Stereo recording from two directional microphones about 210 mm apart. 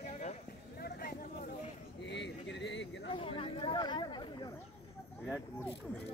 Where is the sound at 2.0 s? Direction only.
55° left (ahead or behind).